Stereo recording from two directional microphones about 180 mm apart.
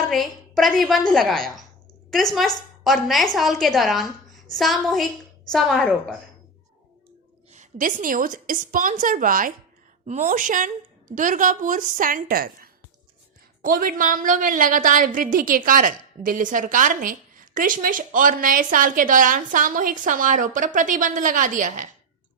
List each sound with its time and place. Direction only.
0.0 s a woman's voice: centre (ahead or behind)
7.5 s a woman's voice: 45° right (ahead or behind)